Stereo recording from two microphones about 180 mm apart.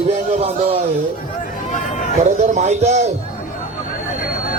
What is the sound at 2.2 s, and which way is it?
Speech, 40° right (ahead or behind).